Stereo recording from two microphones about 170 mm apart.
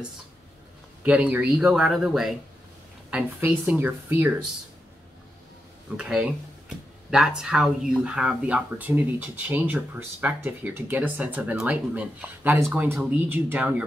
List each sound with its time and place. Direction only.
1.0 s speech: 5° right (ahead or behind)
5.9 s speech: 5° right (ahead or behind)